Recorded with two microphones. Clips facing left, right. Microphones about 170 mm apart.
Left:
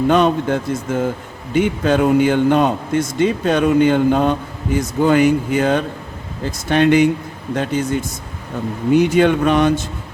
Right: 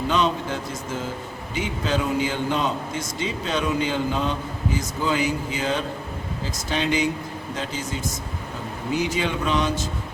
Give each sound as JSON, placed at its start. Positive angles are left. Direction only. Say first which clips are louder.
{"t": 0.1, "sound": "a man's voice", "louder": "left 6 dB", "side_deg": 55}